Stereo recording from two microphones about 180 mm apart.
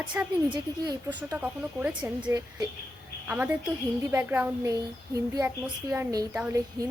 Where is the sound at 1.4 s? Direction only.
10° right (ahead or behind).